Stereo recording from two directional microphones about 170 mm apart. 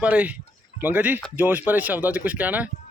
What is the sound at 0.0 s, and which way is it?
Speech, 10° right (ahead or behind).